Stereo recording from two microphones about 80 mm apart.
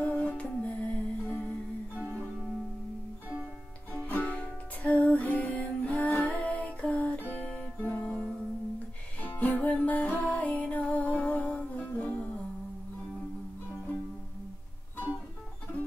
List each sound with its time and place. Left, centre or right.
0.0 s music: centre
2.0 s music: right
3.9 s music: centre
7.8 s guitar: left
9.2 s music: left